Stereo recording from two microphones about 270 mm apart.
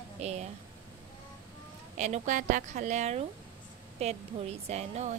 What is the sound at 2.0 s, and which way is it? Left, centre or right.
Speech, right.